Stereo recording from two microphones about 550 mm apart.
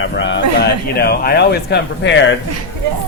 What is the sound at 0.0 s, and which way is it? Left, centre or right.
Speech, centre.